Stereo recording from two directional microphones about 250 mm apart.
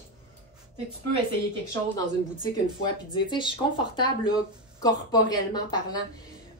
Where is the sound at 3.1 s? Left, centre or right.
Centre.